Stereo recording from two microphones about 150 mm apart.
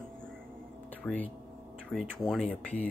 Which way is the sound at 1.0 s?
10° left (ahead or behind).